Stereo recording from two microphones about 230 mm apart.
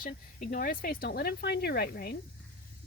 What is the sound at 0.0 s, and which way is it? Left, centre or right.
Speech, left.